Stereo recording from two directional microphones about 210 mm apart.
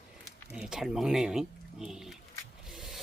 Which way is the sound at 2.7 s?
Centre (ahead or behind).